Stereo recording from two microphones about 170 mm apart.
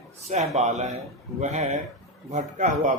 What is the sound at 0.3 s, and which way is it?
Speech, 40° right (ahead or behind).